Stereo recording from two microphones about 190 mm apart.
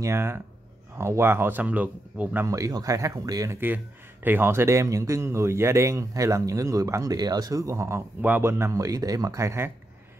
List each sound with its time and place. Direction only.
0.0 s speech: 15° right (ahead or behind)